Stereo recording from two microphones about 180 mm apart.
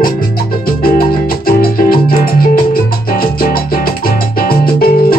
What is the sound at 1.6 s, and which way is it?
Music, 55° left (ahead or behind).